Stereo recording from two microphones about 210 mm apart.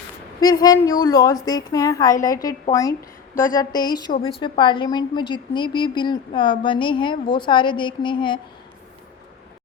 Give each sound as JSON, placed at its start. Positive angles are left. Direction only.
{"t": 0.4, "sound": "a woman's voice", "side_deg": 20}